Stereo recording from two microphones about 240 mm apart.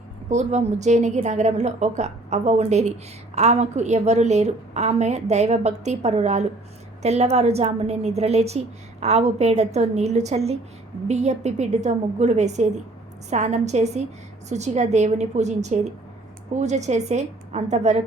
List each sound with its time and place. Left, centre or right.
0.3 s a woman's voice: right